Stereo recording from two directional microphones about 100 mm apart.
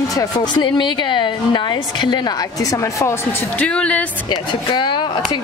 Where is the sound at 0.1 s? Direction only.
35° left (ahead or behind).